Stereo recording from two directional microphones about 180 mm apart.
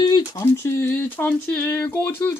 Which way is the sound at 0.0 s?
20° left (ahead or behind).